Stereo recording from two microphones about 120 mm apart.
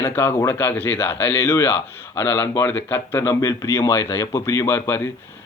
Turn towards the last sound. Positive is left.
turn(degrees=20)  # may be behind; listen again after turning